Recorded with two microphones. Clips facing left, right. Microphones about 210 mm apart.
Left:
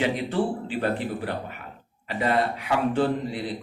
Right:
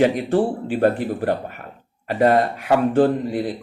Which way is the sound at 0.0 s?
50° right (ahead or behind).